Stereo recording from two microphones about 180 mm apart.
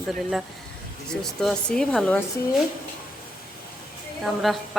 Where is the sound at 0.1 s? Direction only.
Centre (ahead or behind).